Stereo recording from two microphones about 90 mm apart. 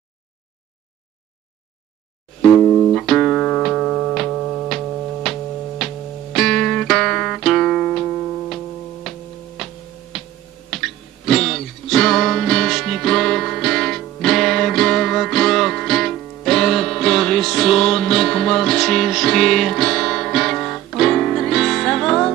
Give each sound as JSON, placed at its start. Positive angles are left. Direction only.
{"t": 2.4, "sound": "music", "side_deg": 10}
{"t": 9.6, "sound": "a sound", "side_deg": 0}
{"t": 10.7, "sound": "music", "side_deg": 5}